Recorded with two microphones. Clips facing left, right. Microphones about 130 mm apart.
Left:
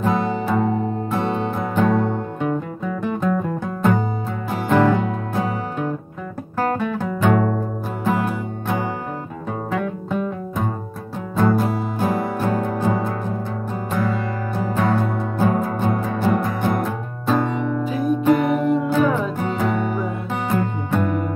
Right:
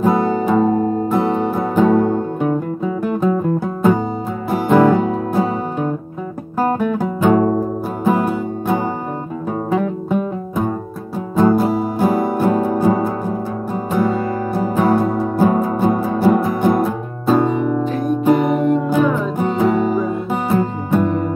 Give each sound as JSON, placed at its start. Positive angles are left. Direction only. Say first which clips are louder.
{"t": 0.0, "sound": "music", "louder": "right 5 dB", "side_deg": -15}
{"t": 6.6, "sound": "guitar", "louder": "right 4 dB", "side_deg": -15}
{"t": 7.3, "sound": "music", "louder": "right 5 dB", "side_deg": -25}
{"t": 11.3, "sound": "music", "louder": "right 5 dB", "side_deg": -10}
{"t": 17.8, "sound": "music", "louder": "even", "side_deg": 0}